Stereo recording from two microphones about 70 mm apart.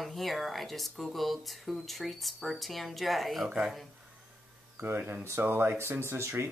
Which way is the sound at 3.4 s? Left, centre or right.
Centre.